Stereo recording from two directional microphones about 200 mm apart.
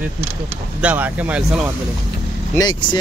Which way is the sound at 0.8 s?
5° right (ahead or behind).